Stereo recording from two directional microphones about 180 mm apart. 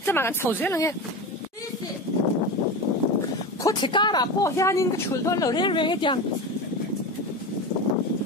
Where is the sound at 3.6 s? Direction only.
25° left (ahead or behind).